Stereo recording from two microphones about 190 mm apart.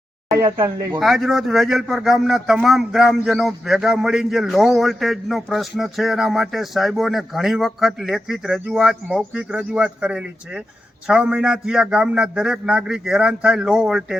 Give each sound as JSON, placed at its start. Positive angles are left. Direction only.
{"t": 0.3, "sound": "speech", "side_deg": -15}
{"t": 0.9, "sound": "a man's voice", "side_deg": 0}